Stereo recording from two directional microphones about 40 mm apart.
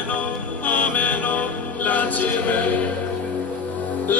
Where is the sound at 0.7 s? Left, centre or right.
Left.